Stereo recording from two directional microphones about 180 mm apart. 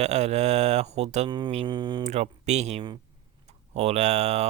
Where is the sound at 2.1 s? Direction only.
40° right (ahead or behind).